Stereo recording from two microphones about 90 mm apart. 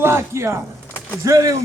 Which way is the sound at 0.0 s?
25° right (ahead or behind).